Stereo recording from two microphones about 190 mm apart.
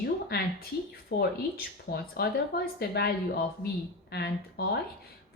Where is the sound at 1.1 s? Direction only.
55° left (ahead or behind).